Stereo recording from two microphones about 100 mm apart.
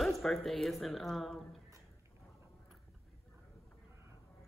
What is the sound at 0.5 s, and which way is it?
A woman's voice, centre (ahead or behind).